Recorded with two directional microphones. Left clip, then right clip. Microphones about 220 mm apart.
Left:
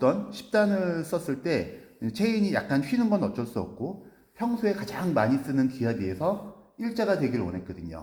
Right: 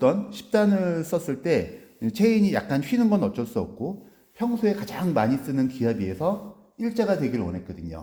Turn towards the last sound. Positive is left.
turn(degrees=-45)  # may be behind; listen again after turning